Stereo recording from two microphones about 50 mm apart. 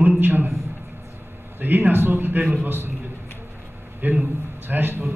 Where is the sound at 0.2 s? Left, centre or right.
Right.